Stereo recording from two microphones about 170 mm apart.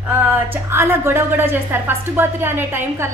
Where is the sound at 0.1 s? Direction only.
15° right (ahead or behind).